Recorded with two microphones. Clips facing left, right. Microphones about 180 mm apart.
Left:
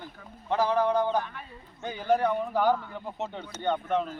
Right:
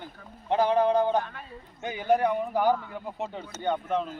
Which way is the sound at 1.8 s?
15° right (ahead or behind).